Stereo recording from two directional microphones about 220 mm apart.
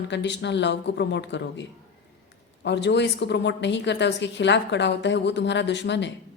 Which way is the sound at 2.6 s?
50° left (ahead or behind).